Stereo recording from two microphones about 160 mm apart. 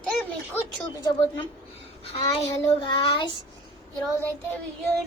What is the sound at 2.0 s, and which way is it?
Child singing, 40° left (ahead or behind).